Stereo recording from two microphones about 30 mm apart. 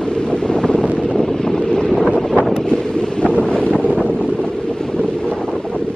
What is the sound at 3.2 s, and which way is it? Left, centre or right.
Wind noise, left.